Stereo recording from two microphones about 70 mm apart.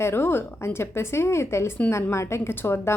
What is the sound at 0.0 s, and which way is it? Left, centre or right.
A woman's voice, left.